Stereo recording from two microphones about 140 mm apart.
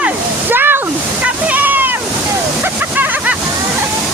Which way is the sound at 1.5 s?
10° right (ahead or behind).